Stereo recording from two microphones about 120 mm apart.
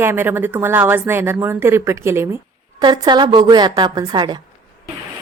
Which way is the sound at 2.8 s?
35° right (ahead or behind).